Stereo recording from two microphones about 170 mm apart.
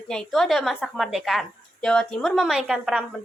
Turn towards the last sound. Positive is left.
turn(degrees=-5)  # may be behind; listen again after turning